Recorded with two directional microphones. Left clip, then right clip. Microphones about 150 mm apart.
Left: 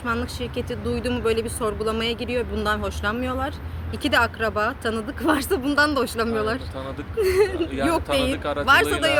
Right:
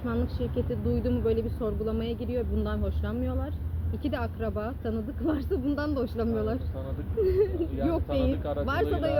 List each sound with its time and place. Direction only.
0.0 s speech: 10° left (ahead or behind)
8.9 s speech: 40° left (ahead or behind)